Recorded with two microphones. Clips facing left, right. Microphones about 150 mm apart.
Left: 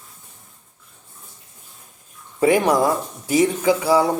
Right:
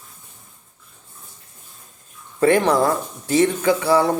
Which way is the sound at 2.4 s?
10° left (ahead or behind).